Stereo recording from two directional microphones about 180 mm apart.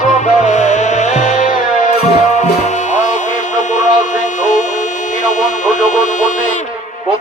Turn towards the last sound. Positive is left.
turn(degrees=45)  # may be behind; listen again after turning